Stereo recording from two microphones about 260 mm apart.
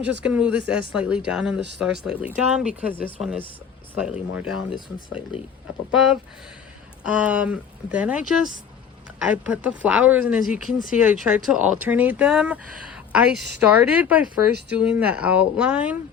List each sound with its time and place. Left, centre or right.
0.0 s a woman's voice: centre
5.3 s speech: centre
5.9 s a woman's voice: centre